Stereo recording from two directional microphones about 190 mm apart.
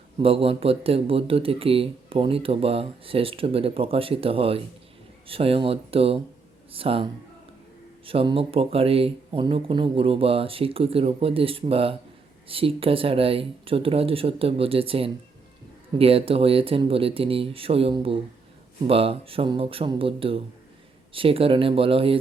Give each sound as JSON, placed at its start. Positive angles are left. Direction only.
{"t": 0.2, "sound": "speech", "side_deg": -30}